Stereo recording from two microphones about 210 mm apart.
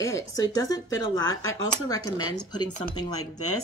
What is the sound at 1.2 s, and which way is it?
Speech, 70° left (ahead or behind).